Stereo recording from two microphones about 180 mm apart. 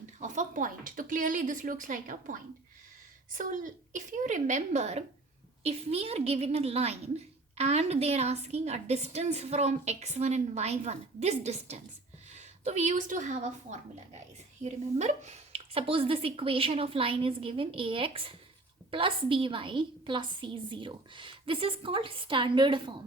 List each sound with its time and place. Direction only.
0.2 s a woman's voice: 45° right (ahead or behind); by 23.0 s 25° right (ahead or behind)